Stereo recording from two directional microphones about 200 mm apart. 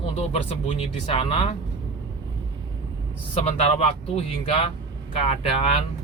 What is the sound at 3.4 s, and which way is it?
Speech, 30° left (ahead or behind).